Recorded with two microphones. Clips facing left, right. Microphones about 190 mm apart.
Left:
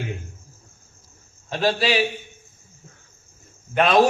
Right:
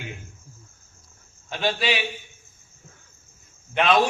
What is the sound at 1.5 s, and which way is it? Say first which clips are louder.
Speech: left 5 dB; 35° left (ahead or behind).